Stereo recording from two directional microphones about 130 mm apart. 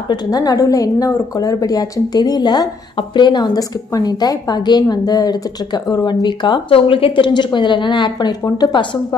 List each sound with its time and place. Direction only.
0.1 s a woman's voice: 30° left (ahead or behind)